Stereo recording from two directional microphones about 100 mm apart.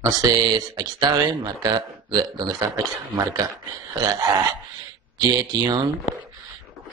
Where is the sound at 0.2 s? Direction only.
40° right (ahead or behind).